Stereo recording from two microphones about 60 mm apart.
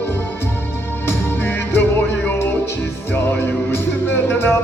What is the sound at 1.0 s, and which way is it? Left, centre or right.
Music, left.